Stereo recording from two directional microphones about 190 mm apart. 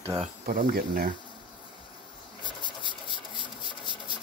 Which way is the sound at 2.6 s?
25° left (ahead or behind).